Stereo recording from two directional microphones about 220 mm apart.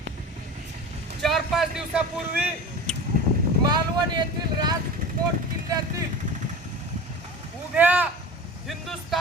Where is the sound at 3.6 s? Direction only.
20° right (ahead or behind).